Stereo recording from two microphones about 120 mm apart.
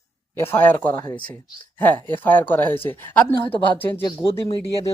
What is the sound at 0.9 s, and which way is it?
Speech, 35° left (ahead or behind).